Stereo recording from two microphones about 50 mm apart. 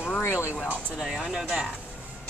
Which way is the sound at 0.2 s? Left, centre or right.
Left.